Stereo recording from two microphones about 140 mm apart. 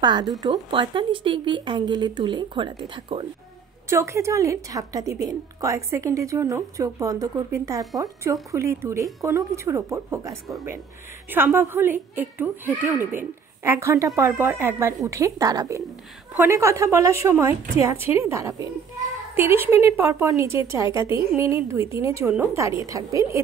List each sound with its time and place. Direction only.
0.0 s a woman's voice: 30° right (ahead or behind)
3.9 s a woman's voice: 20° right (ahead or behind)
11.3 s a child's voice: 15° right (ahead or behind)